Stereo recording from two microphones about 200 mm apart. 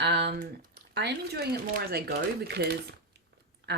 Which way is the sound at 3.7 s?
55° right (ahead or behind).